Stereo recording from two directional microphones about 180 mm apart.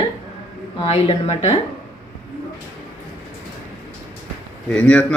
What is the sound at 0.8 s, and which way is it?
Speech, 35° left (ahead or behind).